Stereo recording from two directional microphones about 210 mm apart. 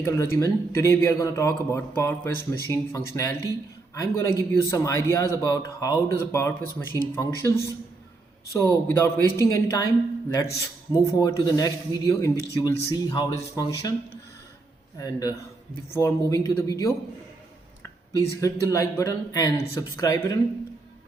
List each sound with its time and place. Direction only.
0.0 s speech: 15° left (ahead or behind)
8.5 s speech: 10° left (ahead or behind)
14.9 s speech: 15° left (ahead or behind)